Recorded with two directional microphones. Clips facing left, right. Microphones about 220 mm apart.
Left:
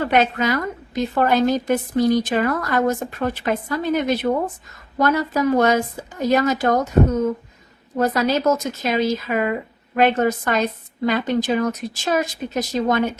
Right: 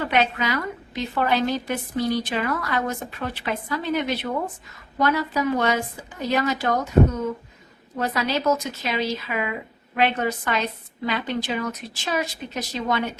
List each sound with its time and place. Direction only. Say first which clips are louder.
0.0 s speech: left 4 dB; 45° left (ahead or behind)
7.9 s speech: left 6 dB; 45° left (ahead or behind)